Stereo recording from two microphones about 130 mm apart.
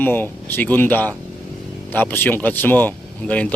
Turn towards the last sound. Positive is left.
turn(degrees=10)  # may be behind; listen again after turning